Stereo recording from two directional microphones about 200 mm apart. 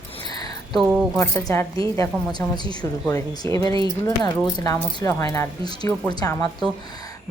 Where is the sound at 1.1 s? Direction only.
15° left (ahead or behind).